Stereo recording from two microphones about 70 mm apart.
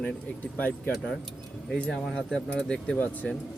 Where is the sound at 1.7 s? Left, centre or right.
Centre.